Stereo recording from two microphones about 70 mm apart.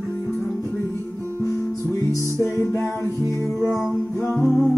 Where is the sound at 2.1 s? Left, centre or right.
Left.